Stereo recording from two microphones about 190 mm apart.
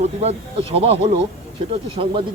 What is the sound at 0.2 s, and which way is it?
Speech, 30° right (ahead or behind).